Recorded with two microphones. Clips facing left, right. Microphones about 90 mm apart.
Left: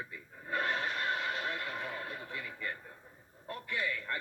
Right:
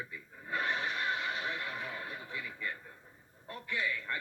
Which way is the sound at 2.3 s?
45° left (ahead or behind).